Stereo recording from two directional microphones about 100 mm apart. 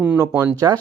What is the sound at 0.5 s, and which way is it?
Speech, 40° right (ahead or behind).